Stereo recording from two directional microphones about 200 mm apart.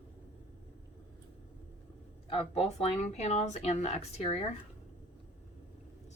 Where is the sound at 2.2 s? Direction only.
30° left (ahead or behind).